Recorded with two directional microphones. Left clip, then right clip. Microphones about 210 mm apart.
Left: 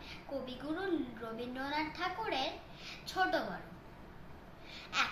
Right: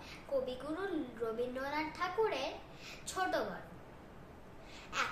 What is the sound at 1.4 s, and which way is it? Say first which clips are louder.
A child's voice: left 2 dB; 15° right (ahead or behind).